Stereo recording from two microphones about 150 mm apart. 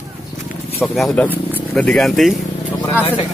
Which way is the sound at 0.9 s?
Centre (ahead or behind).